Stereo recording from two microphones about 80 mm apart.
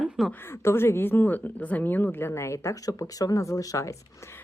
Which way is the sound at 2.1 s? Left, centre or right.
Left.